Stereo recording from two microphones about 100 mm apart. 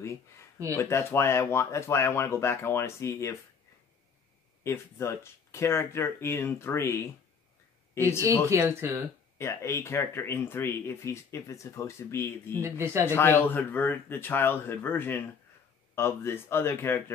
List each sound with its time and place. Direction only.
0.7 s speech: 25° left (ahead or behind)
4.6 s speech: 25° left (ahead or behind)
8.2 s speech: 35° right (ahead or behind)
9.4 s speech: 25° left (ahead or behind)
12.6 s speech: 25° right (ahead or behind)
13.0 s speech: 25° left (ahead or behind)